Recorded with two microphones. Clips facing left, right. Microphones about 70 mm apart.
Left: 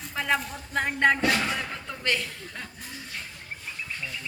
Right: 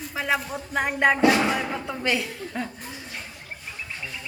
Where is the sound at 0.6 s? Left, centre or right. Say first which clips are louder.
Right 2 dB; centre.